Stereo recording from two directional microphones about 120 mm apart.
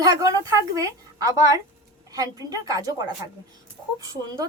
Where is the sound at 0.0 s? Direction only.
30° right (ahead or behind).